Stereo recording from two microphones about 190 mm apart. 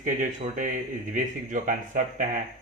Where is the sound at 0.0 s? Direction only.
40° right (ahead or behind).